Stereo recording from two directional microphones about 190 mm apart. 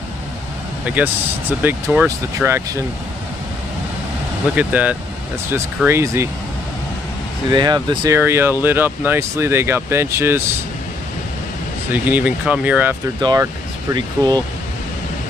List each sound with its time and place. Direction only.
0.9 s speech: 10° right (ahead or behind)
4.6 s speech: 10° right (ahead or behind)
7.5 s speech: 20° right (ahead or behind)
11.9 s speech: 10° right (ahead or behind)
13.2 s speech: 20° right (ahead or behind)